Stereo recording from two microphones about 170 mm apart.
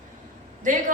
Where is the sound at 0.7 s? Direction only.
50° right (ahead or behind).